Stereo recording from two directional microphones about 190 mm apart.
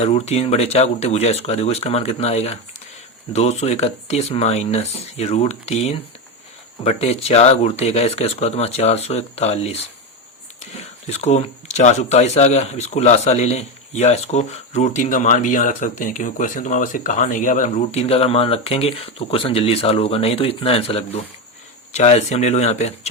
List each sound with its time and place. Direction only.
0.0 s speech: 35° left (ahead or behind)